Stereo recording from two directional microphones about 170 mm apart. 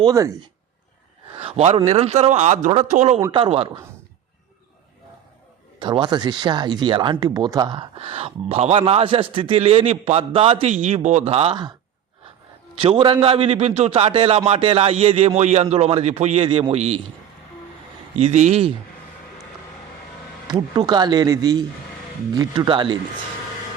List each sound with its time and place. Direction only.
0.0 s a man's voice: 20° right (ahead or behind)
1.4 s speech: 40° right (ahead or behind)
3.3 s speech: 30° right (ahead or behind)
5.8 s speech: 25° right (ahead or behind)
12.8 s speech: 30° right (ahead or behind)
18.2 s speech: 40° right (ahead or behind)
20.5 s a man's voice: 25° right (ahead or behind)